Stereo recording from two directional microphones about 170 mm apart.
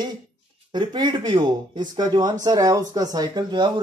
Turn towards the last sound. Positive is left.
turn(degrees=-25)  # may be behind; listen again after turning